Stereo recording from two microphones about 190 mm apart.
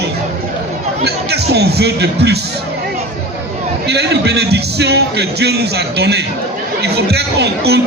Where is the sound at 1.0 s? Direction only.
60° right (ahead or behind).